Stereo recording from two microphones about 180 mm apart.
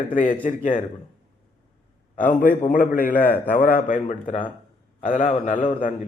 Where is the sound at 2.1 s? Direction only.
45° left (ahead or behind).